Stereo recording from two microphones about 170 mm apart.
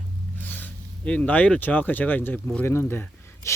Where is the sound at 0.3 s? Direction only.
10° left (ahead or behind).